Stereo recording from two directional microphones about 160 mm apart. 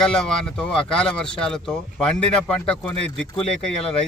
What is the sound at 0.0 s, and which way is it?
Speech, 5° left (ahead or behind).